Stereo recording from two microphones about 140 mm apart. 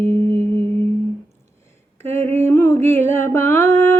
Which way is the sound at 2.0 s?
15° left (ahead or behind).